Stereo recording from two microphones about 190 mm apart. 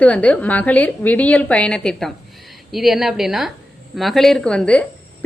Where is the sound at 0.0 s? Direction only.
5° left (ahead or behind).